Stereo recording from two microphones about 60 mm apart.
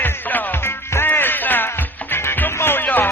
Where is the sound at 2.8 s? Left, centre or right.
Left.